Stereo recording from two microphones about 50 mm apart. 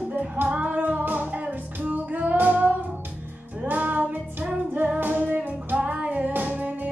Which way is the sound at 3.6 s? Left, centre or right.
Right.